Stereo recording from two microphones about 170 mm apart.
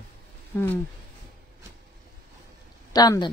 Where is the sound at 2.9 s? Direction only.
25° left (ahead or behind).